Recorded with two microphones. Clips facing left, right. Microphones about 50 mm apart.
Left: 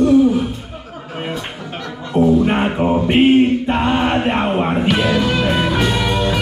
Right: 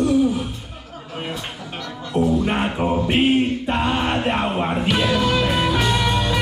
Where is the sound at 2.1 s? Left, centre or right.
Centre.